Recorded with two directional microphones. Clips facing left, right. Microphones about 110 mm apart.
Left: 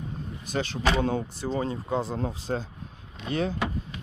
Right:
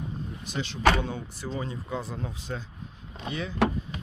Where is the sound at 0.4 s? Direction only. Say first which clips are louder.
Right 2 dB; 45° left (ahead or behind).